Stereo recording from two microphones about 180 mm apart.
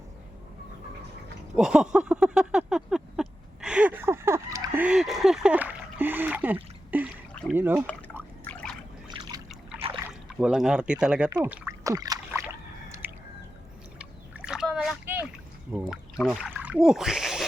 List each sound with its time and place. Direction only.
1.5 s a sound: 5° right (ahead or behind)
7.5 s speech: 10° right (ahead or behind)
9.5 s trickle: 5° right (ahead or behind)
9.9 s speech: 5° right (ahead or behind)
11.4 s a sound: 10° right (ahead or behind)
14.0 s splash: 5° right (ahead or behind)
15.7 s speech: 5° right (ahead or behind)